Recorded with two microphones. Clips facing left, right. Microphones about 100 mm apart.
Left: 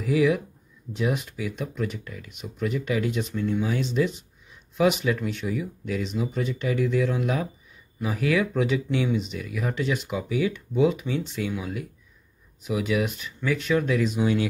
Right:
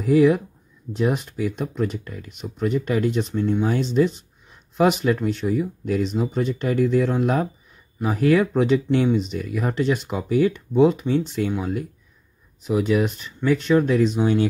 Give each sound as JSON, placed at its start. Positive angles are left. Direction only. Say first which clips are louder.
{"t": 0.0, "sound": "speech", "louder": "right 6 dB", "side_deg": -45}